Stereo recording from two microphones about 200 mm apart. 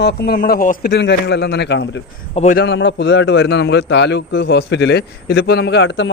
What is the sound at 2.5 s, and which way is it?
A man's voice, 60° left (ahead or behind).